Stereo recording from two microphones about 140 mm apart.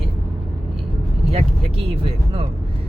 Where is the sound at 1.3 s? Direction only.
45° right (ahead or behind).